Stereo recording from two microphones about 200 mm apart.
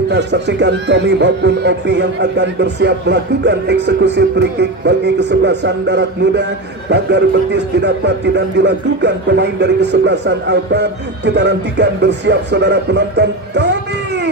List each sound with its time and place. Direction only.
0.1 s speech: 60° right (ahead or behind)